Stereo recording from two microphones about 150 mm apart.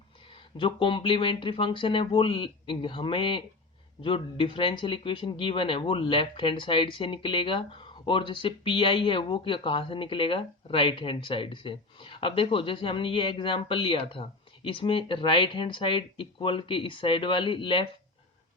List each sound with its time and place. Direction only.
0.5 s speech: 35° left (ahead or behind)